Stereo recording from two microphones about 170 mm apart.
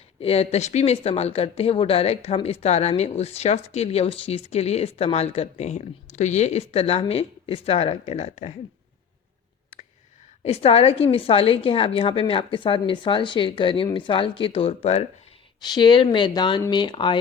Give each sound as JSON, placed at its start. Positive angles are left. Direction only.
{"t": 0.2, "sound": "speech", "side_deg": 35}
{"t": 10.4, "sound": "speech", "side_deg": 35}
{"t": 15.6, "sound": "speech", "side_deg": 25}